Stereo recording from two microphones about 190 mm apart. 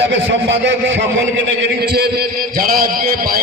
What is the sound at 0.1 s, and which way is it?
A man's voice, 70° right (ahead or behind).